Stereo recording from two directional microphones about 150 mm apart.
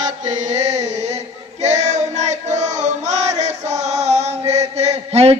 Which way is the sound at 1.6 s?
50° right (ahead or behind).